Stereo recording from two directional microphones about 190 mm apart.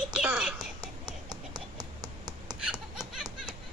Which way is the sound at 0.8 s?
20° right (ahead or behind).